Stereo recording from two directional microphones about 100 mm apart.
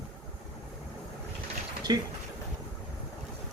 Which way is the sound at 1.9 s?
45° right (ahead or behind).